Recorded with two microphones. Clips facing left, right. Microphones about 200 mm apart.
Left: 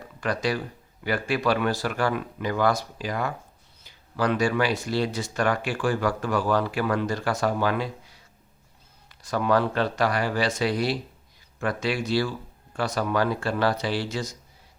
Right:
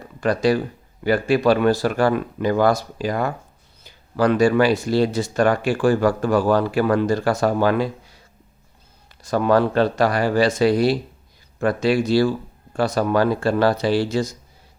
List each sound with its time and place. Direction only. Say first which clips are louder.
0.2 s speech: right 8 dB; 35° right (ahead or behind)
9.2 s speech: right 5 dB; 35° right (ahead or behind)